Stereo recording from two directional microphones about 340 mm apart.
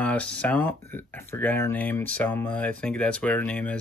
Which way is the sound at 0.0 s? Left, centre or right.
Centre.